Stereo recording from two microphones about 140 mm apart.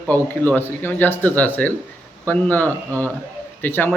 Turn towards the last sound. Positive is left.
turn(degrees=15)  # may be behind; listen again after turning